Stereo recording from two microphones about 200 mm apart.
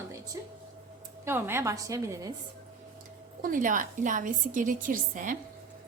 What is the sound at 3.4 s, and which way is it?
A woman's voice, 40° right (ahead or behind).